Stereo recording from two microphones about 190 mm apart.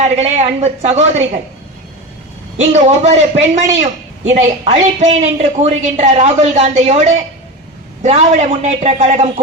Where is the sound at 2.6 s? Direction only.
35° right (ahead or behind).